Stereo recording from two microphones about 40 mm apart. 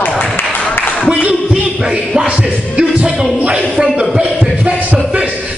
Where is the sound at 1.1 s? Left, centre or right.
Right.